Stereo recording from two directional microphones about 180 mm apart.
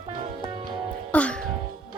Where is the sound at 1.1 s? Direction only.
5° left (ahead or behind).